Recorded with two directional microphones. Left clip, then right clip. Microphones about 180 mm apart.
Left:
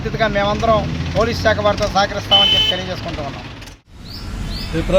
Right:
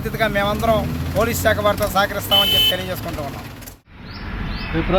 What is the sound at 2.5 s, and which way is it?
Speech, 70° right (ahead or behind).